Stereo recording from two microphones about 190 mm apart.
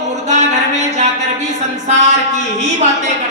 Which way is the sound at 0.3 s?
35° right (ahead or behind).